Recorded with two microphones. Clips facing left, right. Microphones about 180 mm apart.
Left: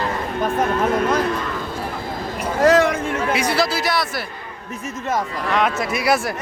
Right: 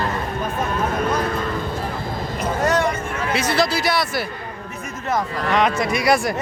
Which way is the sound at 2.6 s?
90° left.